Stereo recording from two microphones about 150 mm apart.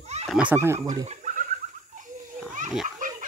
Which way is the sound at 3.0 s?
60° right (ahead or behind).